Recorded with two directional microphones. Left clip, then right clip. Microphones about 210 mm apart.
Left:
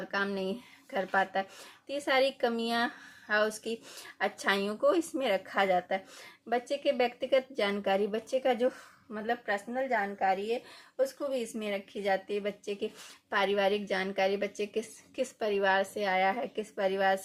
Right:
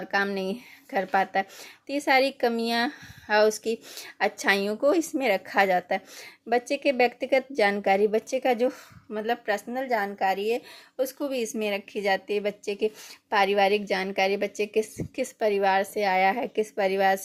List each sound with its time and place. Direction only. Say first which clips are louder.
0.1 s a woman's voice: right 6 dB; 30° right (ahead or behind)